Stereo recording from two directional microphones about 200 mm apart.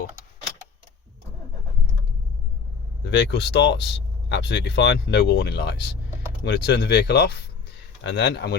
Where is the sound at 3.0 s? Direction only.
60° left (ahead or behind).